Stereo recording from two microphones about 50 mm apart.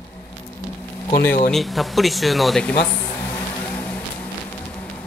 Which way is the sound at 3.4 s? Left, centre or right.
Left.